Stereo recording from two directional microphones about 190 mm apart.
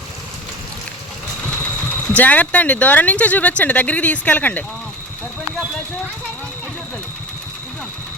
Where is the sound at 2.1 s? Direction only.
10° left (ahead or behind).